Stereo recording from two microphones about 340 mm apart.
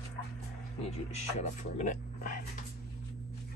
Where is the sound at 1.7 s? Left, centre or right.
Left.